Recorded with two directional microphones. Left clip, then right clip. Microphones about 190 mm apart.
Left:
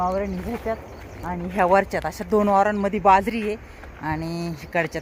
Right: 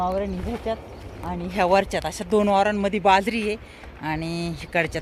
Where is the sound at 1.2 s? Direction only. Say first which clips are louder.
Left 1 dB; 15° left (ahead or behind).